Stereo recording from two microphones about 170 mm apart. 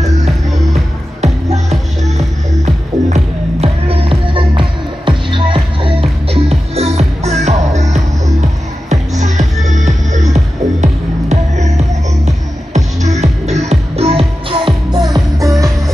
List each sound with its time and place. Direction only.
1.2 s music: 40° right (ahead or behind); by 15.7 s 20° right (ahead or behind)